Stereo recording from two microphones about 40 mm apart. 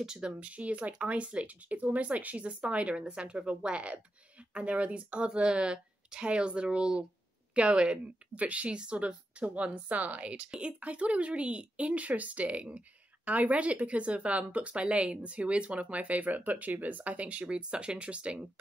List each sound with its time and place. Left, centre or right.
0.0 s speech: centre
0.3 s a woman's voice: right
10.8 s speech: right